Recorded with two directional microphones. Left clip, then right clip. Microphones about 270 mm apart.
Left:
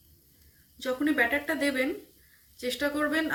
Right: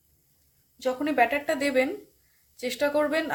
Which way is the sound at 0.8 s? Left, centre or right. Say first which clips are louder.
Right 3 dB; right.